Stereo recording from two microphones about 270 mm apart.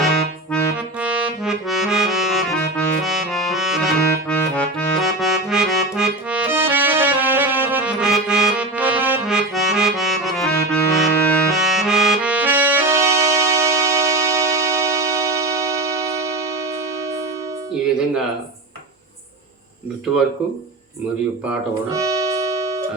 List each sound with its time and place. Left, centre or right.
0.0 s accordion: centre
21.8 s music: centre